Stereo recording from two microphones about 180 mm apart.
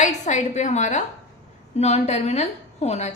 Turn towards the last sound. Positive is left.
turn(degrees=40)  # may be behind; listen again after turning